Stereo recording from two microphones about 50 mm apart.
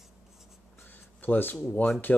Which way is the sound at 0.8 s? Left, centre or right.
Left.